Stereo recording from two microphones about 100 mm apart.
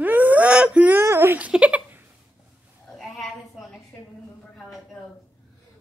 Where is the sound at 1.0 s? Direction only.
20° right (ahead or behind).